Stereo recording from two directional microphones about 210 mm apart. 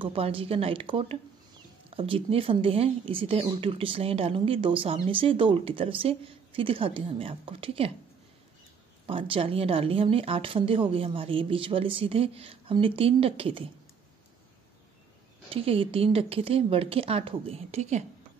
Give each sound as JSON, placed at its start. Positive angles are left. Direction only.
{"t": 0.0, "sound": "speech", "side_deg": -25}
{"t": 9.0, "sound": "speech", "side_deg": -25}
{"t": 15.5, "sound": "speech", "side_deg": -25}